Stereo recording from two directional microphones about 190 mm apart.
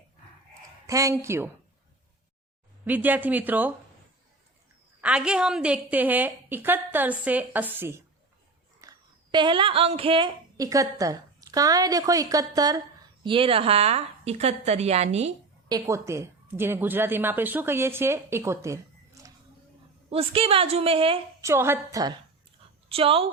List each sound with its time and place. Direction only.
0.9 s a woman's voice: 15° right (ahead or behind)
2.8 s a woman's voice: 10° right (ahead or behind)
4.9 s a woman's voice: 5° right (ahead or behind); by 15.3 s 35° right (ahead or behind)
15.7 s a woman's voice: 15° right (ahead or behind)
20.1 s a woman's voice: 30° right (ahead or behind)
21.4 s a woman's voice: 15° right (ahead or behind)
22.9 s a woman's voice: 30° right (ahead or behind)